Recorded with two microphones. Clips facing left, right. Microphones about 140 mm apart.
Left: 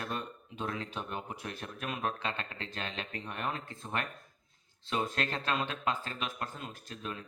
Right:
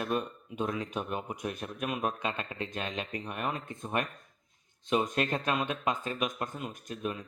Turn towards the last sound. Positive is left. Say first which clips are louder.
# right 6 dB
turn(degrees=-15)  # may be behind; listen again after turning